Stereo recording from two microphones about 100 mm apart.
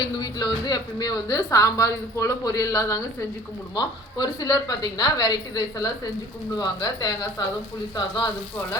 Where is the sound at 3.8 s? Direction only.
45° left (ahead or behind).